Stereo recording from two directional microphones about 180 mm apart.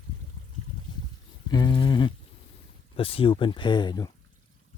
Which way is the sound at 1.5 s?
20° left (ahead or behind).